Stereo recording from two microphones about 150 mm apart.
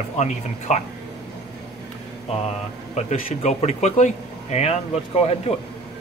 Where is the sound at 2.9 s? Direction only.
50° left (ahead or behind).